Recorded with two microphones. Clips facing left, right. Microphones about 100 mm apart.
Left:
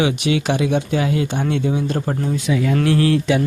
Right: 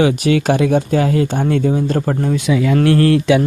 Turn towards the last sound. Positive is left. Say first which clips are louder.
# right 4 dB
turn(degrees=-85)